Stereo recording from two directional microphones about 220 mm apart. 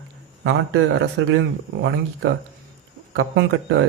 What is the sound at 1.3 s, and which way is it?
Speech, 50° right (ahead or behind).